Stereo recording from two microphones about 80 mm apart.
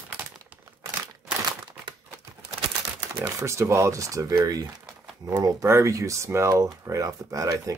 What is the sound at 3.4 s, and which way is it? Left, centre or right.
Speech, right.